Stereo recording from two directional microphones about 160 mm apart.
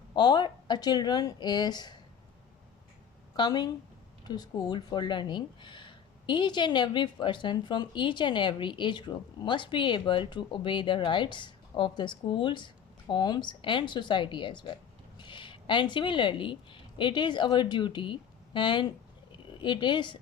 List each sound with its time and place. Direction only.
0.1 s speech: 30° left (ahead or behind)
3.3 s a woman's voice: 25° left (ahead or behind)